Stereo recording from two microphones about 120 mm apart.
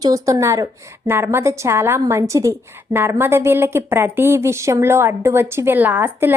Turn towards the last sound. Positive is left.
turn(degrees=-15)  # may be behind; listen again after turning